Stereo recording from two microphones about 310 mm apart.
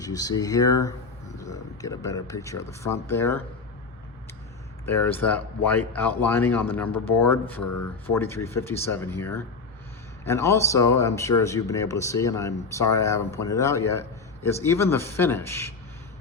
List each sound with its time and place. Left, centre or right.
0.0 s a man's voice: centre
4.9 s speech: centre
7.6 s speech: left
8.0 s a man's voice: centre